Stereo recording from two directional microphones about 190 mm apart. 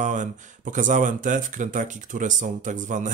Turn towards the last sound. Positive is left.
turn(degrees=-40)  # may be behind; listen again after turning